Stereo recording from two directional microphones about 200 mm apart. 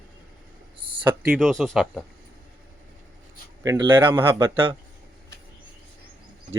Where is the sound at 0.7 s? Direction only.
25° right (ahead or behind).